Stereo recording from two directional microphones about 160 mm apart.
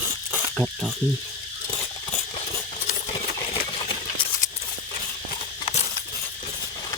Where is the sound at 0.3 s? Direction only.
5° right (ahead or behind).